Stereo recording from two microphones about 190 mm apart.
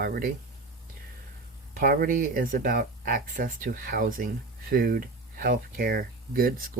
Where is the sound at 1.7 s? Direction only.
50° right (ahead or behind).